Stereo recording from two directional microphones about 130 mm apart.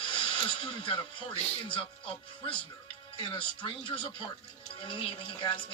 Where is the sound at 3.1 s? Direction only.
40° left (ahead or behind).